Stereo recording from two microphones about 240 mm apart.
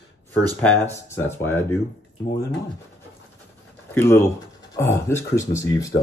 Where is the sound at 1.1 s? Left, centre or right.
Centre.